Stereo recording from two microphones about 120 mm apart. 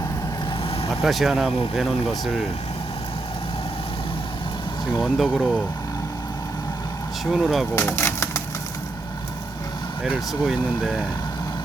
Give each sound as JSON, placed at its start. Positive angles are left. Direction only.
{"t": 1.0, "sound": "speech", "side_deg": 0}
{"t": 4.9, "sound": "speech", "side_deg": 0}
{"t": 7.3, "sound": "speech", "side_deg": 0}
{"t": 7.8, "sound": "a sound", "side_deg": 20}
{"t": 10.4, "sound": "speech", "side_deg": -5}